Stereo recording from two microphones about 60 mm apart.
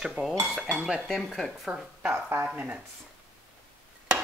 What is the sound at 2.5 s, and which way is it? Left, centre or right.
Speech, right.